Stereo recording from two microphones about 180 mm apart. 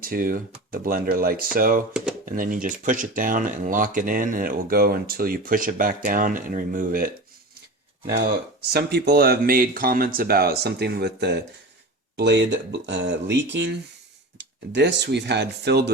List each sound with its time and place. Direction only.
0.0 s speech: 55° right (ahead or behind)
8.1 s speech: 65° right (ahead or behind)